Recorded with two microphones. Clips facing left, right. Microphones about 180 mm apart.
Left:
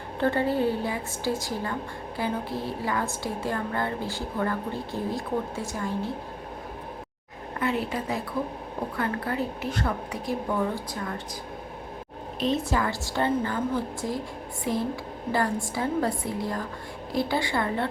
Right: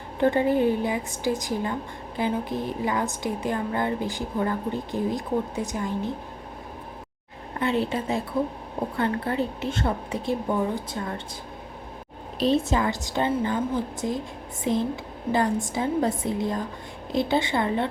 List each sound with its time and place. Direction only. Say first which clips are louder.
0.2 s a woman's voice: right 3 dB; 15° right (ahead or behind)
7.6 s a woman's voice: right 3 dB; 25° right (ahead or behind)
12.4 s a woman's voice: right 3 dB; 30° right (ahead or behind)